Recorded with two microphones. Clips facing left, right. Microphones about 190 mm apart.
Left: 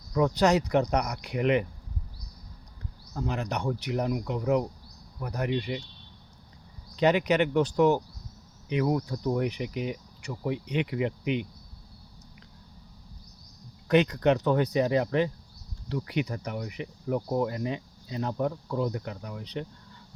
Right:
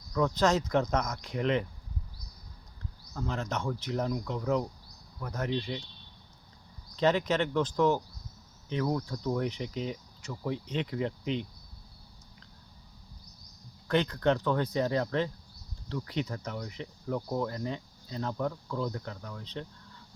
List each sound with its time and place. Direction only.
0.1 s speech: 15° left (ahead or behind)
3.2 s speech: 15° left (ahead or behind)
6.9 s speech: 15° left (ahead or behind)
13.8 s speech: 15° left (ahead or behind)